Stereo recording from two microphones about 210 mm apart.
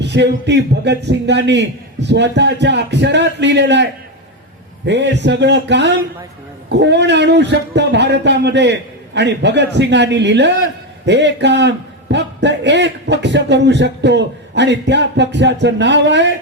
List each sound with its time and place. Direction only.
0.0 s a man's voice: 55° right (ahead or behind)
4.9 s a man's voice: 55° right (ahead or behind)